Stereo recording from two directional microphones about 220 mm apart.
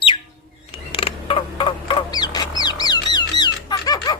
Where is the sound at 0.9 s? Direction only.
25° left (ahead or behind).